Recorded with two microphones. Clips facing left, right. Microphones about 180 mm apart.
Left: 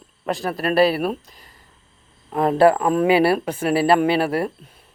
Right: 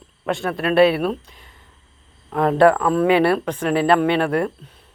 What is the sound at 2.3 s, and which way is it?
Speech, 5° left (ahead or behind).